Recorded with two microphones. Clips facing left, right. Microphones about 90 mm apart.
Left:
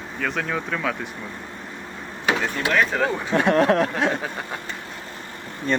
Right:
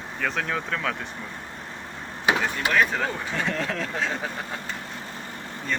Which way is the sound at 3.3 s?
65° left (ahead or behind).